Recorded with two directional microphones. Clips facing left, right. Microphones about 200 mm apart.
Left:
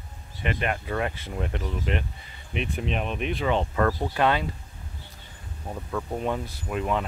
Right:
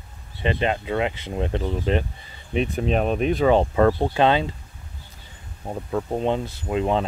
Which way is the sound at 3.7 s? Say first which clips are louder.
Right 6 dB; 25° right (ahead or behind).